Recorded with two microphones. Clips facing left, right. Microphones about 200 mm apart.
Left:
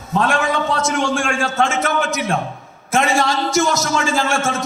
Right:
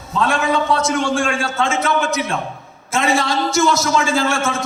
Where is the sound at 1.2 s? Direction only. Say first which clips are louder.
Left 1 dB; 45° left (ahead or behind).